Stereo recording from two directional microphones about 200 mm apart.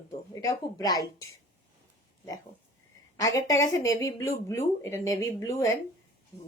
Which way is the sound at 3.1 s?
15° left (ahead or behind).